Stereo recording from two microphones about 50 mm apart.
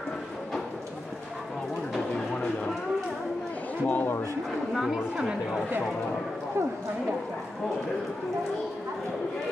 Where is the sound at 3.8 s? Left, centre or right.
Left.